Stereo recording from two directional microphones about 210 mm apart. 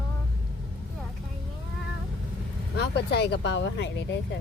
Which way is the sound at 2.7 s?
50° left (ahead or behind).